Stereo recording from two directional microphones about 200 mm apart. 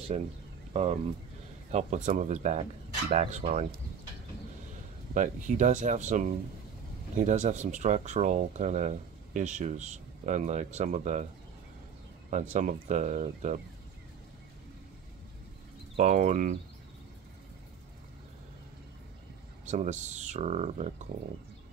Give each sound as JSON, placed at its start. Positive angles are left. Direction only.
{"t": 0.1, "sound": "speech", "side_deg": -30}
{"t": 1.7, "sound": "speech", "side_deg": -35}
{"t": 5.1, "sound": "speech", "side_deg": -40}
{"t": 12.3, "sound": "speech", "side_deg": -35}
{"t": 16.0, "sound": "speech", "side_deg": -35}
{"t": 19.6, "sound": "speech", "side_deg": -35}